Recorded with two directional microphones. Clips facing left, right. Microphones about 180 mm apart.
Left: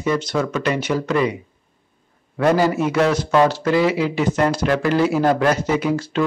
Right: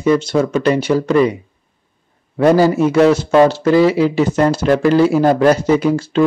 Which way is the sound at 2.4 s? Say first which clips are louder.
Right 6 dB; 30° right (ahead or behind).